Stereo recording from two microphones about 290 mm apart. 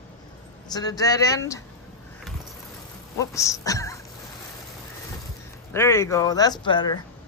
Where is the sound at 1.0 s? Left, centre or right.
Centre.